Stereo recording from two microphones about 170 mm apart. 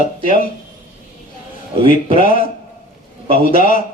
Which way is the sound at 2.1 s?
50° left (ahead or behind).